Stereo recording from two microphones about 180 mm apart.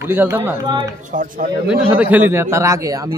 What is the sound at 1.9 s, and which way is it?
A man's voice, 10° right (ahead or behind).